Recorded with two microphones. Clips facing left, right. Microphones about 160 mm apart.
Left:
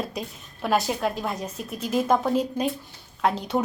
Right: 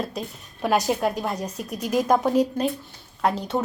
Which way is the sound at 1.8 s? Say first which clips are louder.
Right 2 dB; 10° right (ahead or behind).